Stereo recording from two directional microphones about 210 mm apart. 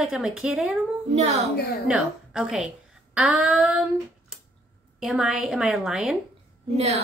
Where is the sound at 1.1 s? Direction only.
30° right (ahead or behind).